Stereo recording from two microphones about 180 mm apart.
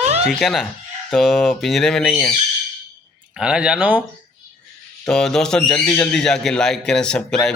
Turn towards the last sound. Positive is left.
turn(degrees=5)  # may be behind; listen again after turning